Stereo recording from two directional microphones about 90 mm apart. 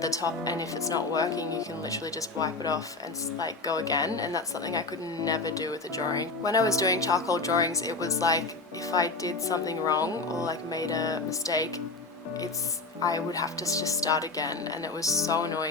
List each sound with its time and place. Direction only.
0.0 s speech: 40° left (ahead or behind)
13.0 s speech: 40° left (ahead or behind)